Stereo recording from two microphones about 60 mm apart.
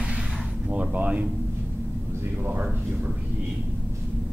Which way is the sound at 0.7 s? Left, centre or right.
Right.